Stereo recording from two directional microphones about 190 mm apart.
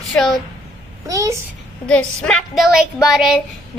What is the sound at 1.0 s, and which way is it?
Speech, 15° right (ahead or behind).